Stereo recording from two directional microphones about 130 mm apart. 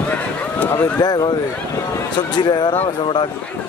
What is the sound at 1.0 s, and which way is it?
Speech, 30° left (ahead or behind).